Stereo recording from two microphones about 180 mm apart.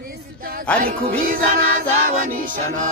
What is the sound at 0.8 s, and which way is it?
Music, 50° right (ahead or behind).